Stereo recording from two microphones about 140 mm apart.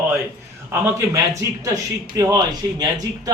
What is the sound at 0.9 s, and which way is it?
Speech, 25° right (ahead or behind).